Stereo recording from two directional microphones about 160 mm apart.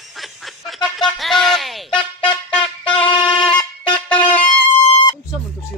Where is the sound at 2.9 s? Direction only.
30° left (ahead or behind).